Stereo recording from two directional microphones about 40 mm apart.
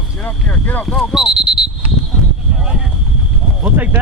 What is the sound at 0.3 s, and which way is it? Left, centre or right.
Speech, left.